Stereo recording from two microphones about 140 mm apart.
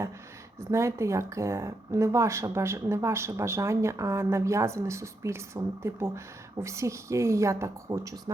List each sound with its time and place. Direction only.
0.7 s speech: 20° right (ahead or behind)